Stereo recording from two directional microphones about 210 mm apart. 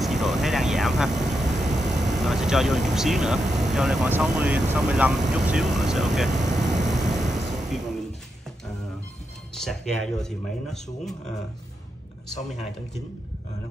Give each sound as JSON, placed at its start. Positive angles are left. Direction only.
{"t": 0.0, "sound": "vehicle", "side_deg": 0}
{"t": 9.5, "sound": "speech", "side_deg": 0}